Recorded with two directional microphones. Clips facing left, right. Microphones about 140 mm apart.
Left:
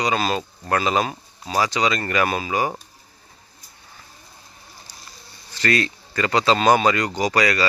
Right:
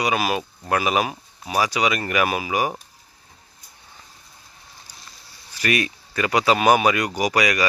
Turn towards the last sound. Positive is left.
turn(degrees=-15)  # may be behind; listen again after turning